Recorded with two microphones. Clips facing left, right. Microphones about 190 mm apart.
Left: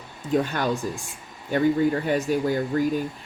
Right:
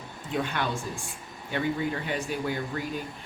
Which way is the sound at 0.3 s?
40° left (ahead or behind).